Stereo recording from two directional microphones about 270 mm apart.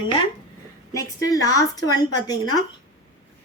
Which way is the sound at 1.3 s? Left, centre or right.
Centre.